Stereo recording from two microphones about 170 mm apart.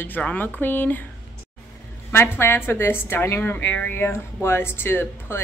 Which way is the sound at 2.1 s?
15° left (ahead or behind).